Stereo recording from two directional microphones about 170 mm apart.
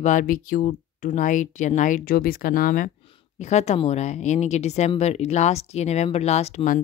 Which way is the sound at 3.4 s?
40° left (ahead or behind).